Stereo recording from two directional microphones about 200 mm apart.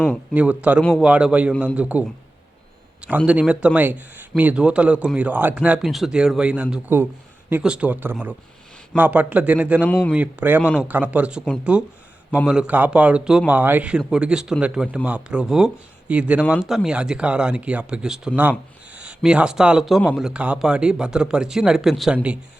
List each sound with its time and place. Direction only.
0.3 s a man's voice: 5° right (ahead or behind)
0.8 s speech: 5° left (ahead or behind)
1.0 s a man's voice: 5° right (ahead or behind)
3.2 s a man's voice: 5° right (ahead or behind)
9.8 s speech: 5° left (ahead or behind)
10.1 s a man's voice: 10° right (ahead or behind)